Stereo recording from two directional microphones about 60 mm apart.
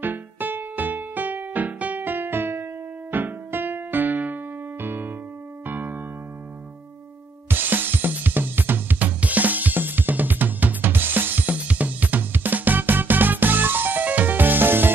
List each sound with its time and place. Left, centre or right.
0.0 s music: right
3.1 s electric piano: right
4.8 s keyboard: right
5.7 s electric piano: right
7.4 s drum kit: right